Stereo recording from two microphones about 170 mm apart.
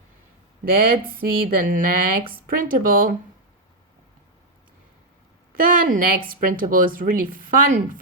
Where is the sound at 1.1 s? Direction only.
55° right (ahead or behind).